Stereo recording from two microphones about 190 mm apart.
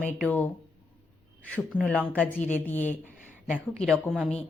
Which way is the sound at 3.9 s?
5° left (ahead or behind).